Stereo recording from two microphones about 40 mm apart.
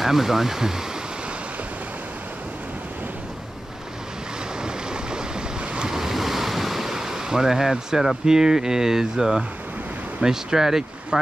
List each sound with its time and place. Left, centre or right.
0.0 s speech: centre
4.6 s waves: centre
5.9 s waves: centre
8.3 s speech: centre